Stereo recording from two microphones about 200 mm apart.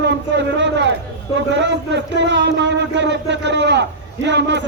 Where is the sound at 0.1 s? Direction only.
60° right (ahead or behind).